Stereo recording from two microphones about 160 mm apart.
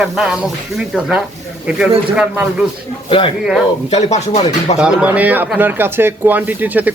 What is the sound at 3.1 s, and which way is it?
Speech, 35° left (ahead or behind).